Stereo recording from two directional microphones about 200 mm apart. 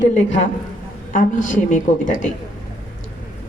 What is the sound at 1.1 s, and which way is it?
A woman's voice, 40° left (ahead or behind).